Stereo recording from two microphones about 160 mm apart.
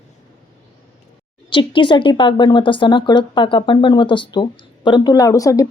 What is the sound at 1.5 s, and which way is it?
Speech, 30° left (ahead or behind).